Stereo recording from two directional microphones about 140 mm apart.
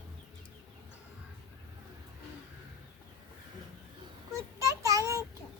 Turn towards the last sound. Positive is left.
turn(degrees=-25)  # may be behind; listen again after turning